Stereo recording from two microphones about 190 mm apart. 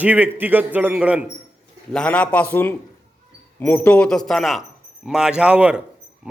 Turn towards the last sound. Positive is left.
turn(degrees=-5)  # may be behind; listen again after turning